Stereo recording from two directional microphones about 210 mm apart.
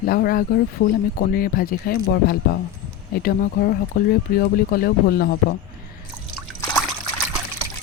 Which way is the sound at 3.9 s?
40° left (ahead or behind).